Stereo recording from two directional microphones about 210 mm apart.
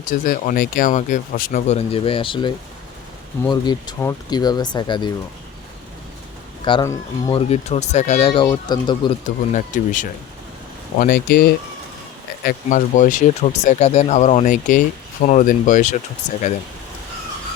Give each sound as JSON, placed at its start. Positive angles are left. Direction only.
{"t": 0.0, "sound": "speech", "side_deg": 40}
{"t": 1.6, "sound": "speech", "side_deg": 30}
{"t": 3.5, "sound": "speech", "side_deg": 20}
{"t": 6.7, "sound": "speech", "side_deg": 20}
{"t": 7.5, "sound": "speech", "side_deg": 30}
{"t": 9.2, "sound": "speech", "side_deg": 40}